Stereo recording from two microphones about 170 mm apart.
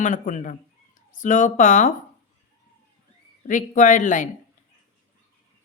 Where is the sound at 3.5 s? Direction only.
50° left (ahead or behind).